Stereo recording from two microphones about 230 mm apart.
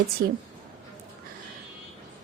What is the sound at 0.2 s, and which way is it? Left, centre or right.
Speech, right.